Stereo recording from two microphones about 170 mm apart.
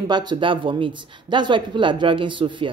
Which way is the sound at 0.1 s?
25° right (ahead or behind).